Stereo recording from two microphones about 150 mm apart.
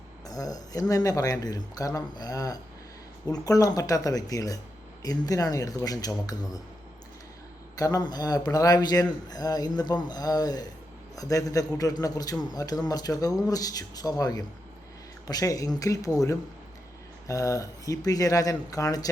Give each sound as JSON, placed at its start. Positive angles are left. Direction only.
{"t": 0.3, "sound": "speech", "side_deg": 25}
{"t": 7.8, "sound": "speech", "side_deg": 25}